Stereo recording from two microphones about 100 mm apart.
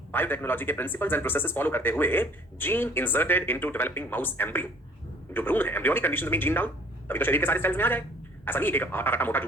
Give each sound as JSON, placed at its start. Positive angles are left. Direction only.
{"t": 0.1, "sound": "speech", "side_deg": 20}